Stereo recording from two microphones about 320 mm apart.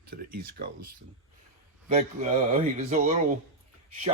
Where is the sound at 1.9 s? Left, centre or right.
Right.